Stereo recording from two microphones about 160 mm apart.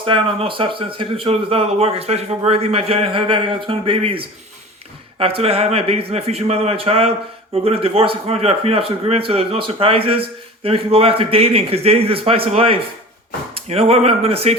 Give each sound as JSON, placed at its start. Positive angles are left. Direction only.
{"t": 0.0, "sound": "speech", "side_deg": -30}